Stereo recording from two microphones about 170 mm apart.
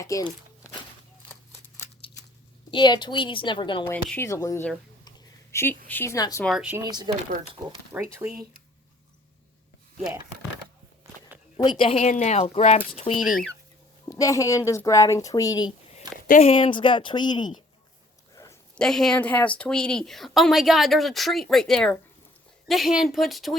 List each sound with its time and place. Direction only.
0.0 s a woman's voice: 20° left (ahead or behind)
2.6 s a woman's voice: 25° left (ahead or behind)
3.8 s speech: 10° left (ahead or behind)
5.0 s a sound: 15° left (ahead or behind)
6.4 s speech: 5° right (ahead or behind)
6.8 s speech: 25° right (ahead or behind)
7.9 s speech: 10° right (ahead or behind)
11.5 s a woman's voice: 30° left (ahead or behind)
11.9 s speech: 45° left (ahead or behind)
13.1 s speech: centre (ahead or behind)
14.1 s a woman's voice: 20° left (ahead or behind)
18.4 s a sound: 15° left (ahead or behind)
18.7 s speech: 5° left (ahead or behind)